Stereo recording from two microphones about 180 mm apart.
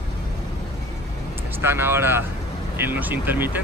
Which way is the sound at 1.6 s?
15° right (ahead or behind).